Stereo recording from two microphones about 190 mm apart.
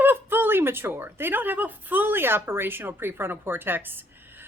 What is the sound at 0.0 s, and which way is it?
A woman's voice, 10° right (ahead or behind).